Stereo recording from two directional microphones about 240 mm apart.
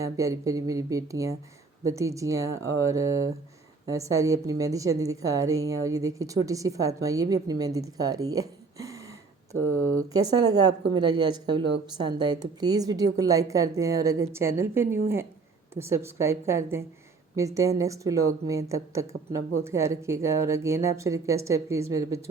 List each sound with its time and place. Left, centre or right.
0.0 s a woman's voice: centre
9.6 s speech: right
10.1 s a woman's voice: centre